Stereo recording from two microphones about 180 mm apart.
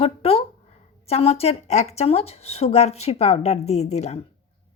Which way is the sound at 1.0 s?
35° left (ahead or behind).